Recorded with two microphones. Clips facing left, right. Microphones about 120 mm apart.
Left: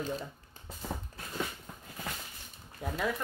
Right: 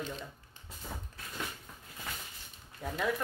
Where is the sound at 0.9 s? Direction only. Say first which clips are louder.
Left 5 dB; 35° left (ahead or behind).